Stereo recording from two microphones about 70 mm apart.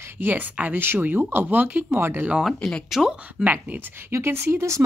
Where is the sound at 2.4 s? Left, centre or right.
Centre.